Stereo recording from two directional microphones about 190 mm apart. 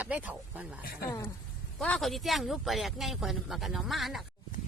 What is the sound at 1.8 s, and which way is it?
Speech, 5° left (ahead or behind).